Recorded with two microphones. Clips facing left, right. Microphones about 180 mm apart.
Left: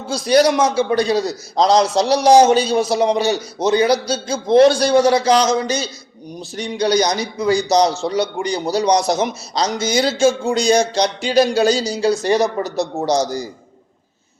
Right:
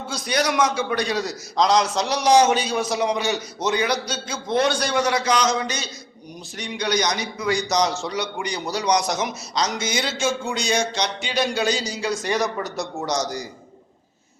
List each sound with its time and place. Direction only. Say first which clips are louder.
0.1 s a man's voice: left 10 dB; 30° left (ahead or behind)